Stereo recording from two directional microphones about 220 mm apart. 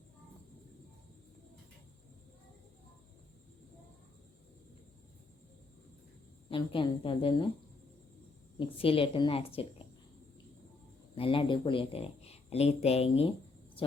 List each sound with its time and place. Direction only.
6.5 s a woman's voice: 25° left (ahead or behind)
8.5 s a woman's voice: 25° left (ahead or behind)
11.1 s a woman's voice: 25° left (ahead or behind)